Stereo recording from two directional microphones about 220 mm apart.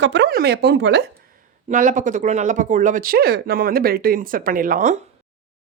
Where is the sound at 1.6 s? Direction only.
35° right (ahead or behind).